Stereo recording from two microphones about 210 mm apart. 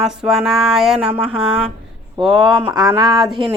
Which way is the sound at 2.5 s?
15° right (ahead or behind).